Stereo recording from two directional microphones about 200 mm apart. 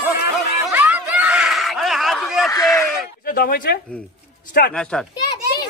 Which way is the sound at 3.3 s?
45° left (ahead or behind).